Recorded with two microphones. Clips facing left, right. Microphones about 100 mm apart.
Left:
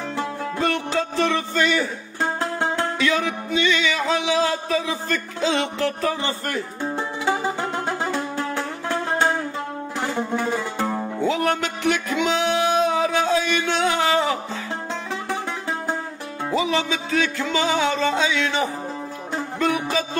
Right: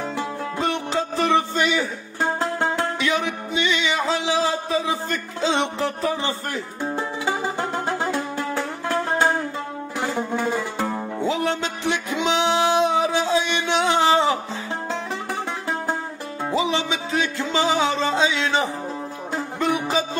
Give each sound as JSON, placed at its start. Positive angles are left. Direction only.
{"t": 0.1, "sound": "music", "side_deg": -15}
{"t": 1.8, "sound": "music", "side_deg": 0}
{"t": 3.0, "sound": "music", "side_deg": -25}
{"t": 4.6, "sound": "a sound", "side_deg": -25}
{"t": 6.8, "sound": "music", "side_deg": 0}
{"t": 11.2, "sound": "music", "side_deg": -20}
{"t": 16.4, "sound": "music", "side_deg": -20}